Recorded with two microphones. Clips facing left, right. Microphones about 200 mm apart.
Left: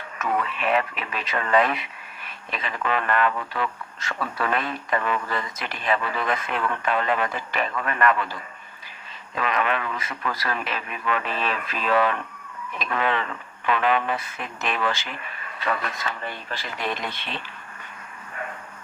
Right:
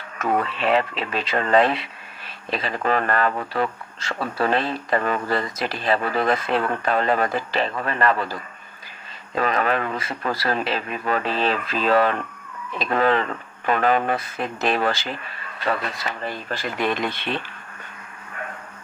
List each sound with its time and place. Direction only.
0.2 s speech: 30° right (ahead or behind)